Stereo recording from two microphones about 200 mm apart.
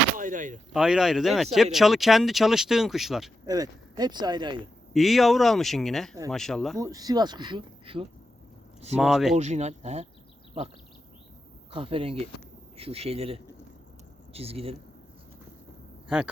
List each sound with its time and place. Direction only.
0.2 s a sound: 40° right (ahead or behind)
0.7 s speech: 5° right (ahead or behind)
3.4 s speech: 20° right (ahead or behind)
4.9 s speech: centre (ahead or behind)
6.7 s speech: 20° right (ahead or behind)
9.0 s speech: centre (ahead or behind)
9.3 s speech: 35° right (ahead or behind)
11.7 s speech: 25° right (ahead or behind)
16.0 s speech: 5° right (ahead or behind)